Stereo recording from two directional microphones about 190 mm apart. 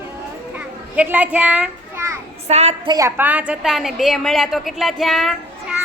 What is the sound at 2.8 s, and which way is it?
A woman's voice, 15° right (ahead or behind).